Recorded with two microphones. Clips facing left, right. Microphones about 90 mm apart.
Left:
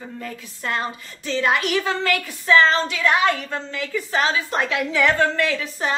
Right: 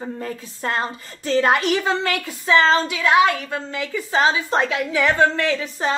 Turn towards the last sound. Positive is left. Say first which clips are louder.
# right 2 dB
turn(degrees=-25)  # may be behind; listen again after turning